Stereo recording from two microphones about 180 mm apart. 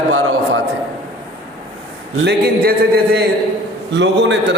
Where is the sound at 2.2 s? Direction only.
60° right (ahead or behind).